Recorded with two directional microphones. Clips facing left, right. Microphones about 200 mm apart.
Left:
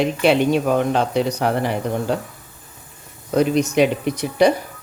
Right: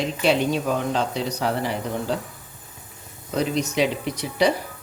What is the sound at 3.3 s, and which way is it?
Speech, 55° left (ahead or behind).